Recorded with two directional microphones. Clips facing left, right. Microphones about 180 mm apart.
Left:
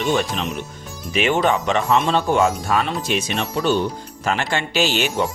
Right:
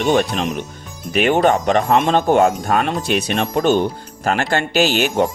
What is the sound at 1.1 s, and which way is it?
Speech, 55° right (ahead or behind).